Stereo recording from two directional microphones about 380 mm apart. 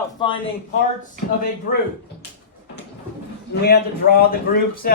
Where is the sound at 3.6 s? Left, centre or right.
Left.